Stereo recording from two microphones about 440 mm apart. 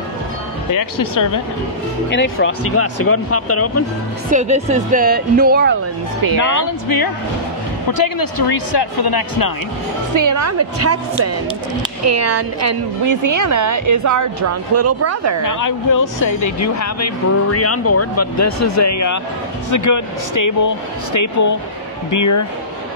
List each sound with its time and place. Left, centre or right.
2.0 s speech: left
4.3 s speech: centre
6.3 s speech: left
10.1 s a woman's voice: right
15.4 s speech: left